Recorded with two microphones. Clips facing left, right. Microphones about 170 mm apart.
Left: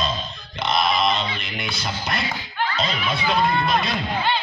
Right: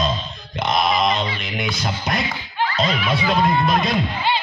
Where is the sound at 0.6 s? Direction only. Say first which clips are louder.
Right 2 dB; 45° right (ahead or behind).